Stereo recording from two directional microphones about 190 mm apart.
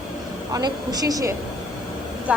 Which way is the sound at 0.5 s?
20° right (ahead or behind).